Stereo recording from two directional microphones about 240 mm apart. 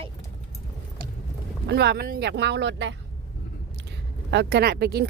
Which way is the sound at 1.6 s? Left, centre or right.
Right.